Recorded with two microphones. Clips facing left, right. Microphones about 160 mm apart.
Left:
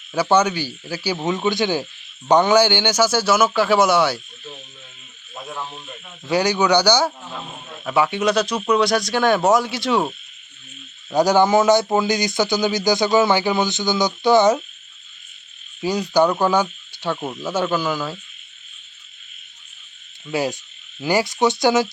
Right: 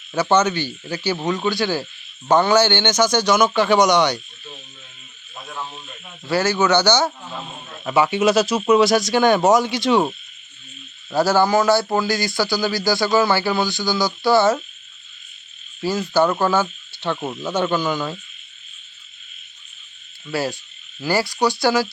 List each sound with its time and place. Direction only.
0.1 s cricket: 10° left (ahead or behind)
1.4 s cricket: 20° left (ahead or behind)
5.5 s speech: 5° left (ahead or behind)
6.3 s cricket: 15° left (ahead or behind)
7.9 s speech: centre (ahead or behind)
11.1 s a man's voice: 15° left (ahead or behind)
15.8 s cricket: 15° left (ahead or behind)
20.2 s cricket: 15° left (ahead or behind)
21.0 s a man's voice: 20° left (ahead or behind)